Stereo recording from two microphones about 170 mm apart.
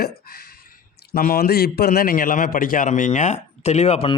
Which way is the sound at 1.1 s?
60° left (ahead or behind).